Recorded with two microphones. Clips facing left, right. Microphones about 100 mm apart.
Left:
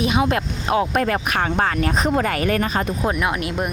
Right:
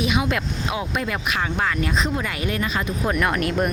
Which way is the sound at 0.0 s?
35° left (ahead or behind).